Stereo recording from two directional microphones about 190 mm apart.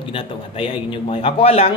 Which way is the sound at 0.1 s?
30° left (ahead or behind).